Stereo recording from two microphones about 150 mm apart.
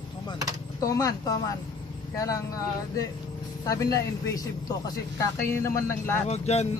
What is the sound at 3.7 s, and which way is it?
A man's voice, 20° left (ahead or behind).